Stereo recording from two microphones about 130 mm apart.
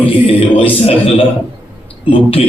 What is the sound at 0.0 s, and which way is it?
Speech, 45° left (ahead or behind).